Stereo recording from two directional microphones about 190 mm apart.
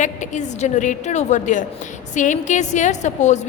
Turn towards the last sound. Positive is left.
turn(degrees=40)  # may be behind; listen again after turning